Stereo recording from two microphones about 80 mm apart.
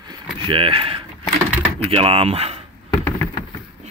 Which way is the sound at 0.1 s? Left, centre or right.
Right.